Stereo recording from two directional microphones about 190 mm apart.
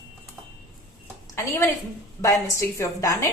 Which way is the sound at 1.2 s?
15° left (ahead or behind).